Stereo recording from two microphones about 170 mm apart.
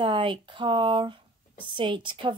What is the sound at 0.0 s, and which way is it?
A woman's voice, 30° right (ahead or behind).